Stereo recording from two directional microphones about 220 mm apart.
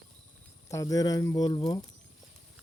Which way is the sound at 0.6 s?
15° left (ahead or behind).